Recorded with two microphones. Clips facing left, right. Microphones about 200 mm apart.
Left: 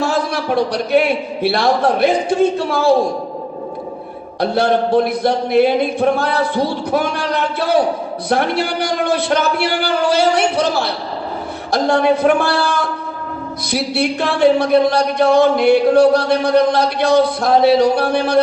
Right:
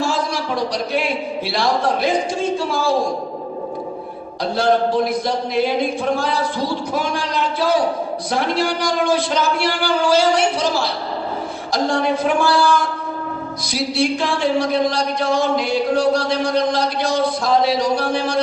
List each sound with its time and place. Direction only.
0.0 s a man's voice: 60° left (ahead or behind)
4.4 s speech: 60° left (ahead or behind)